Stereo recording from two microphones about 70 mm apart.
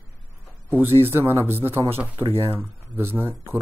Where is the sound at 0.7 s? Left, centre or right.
Right.